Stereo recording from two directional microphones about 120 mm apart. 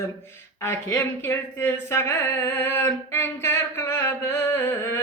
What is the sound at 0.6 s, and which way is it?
Speech, 20° left (ahead or behind).